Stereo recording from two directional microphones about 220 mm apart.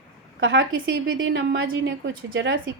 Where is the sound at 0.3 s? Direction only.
60° right (ahead or behind).